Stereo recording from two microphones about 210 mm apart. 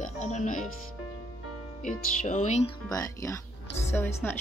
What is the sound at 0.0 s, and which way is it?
Music, 35° left (ahead or behind).